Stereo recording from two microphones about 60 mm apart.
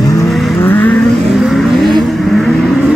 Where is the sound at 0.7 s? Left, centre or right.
Left.